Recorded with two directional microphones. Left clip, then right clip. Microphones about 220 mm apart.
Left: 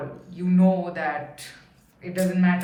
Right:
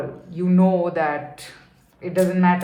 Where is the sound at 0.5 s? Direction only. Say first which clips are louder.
Right 4 dB; 25° right (ahead or behind).